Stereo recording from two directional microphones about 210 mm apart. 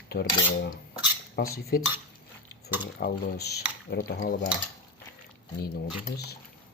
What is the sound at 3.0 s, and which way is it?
Speech, 50° left (ahead or behind).